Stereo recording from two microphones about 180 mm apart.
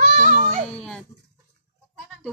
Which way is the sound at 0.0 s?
45° right (ahead or behind).